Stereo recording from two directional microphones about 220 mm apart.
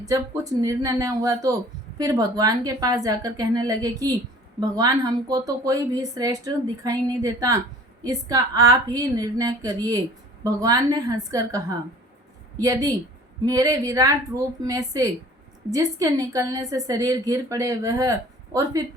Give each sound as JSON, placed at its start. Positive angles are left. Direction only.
{"t": 0.6, "sound": "a woman's voice", "side_deg": -15}